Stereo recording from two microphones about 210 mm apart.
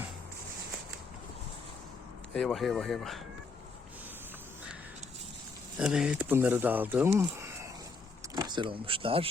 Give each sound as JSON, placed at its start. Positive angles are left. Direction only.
{"t": 2.3, "sound": "speech", "side_deg": 0}
{"t": 5.8, "sound": "speech", "side_deg": -5}
{"t": 7.2, "sound": "a sound", "side_deg": -10}
{"t": 8.2, "sound": "speech", "side_deg": -20}